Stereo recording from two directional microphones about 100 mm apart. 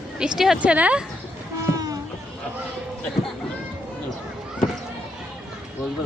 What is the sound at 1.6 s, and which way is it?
Run, 35° right (ahead or behind).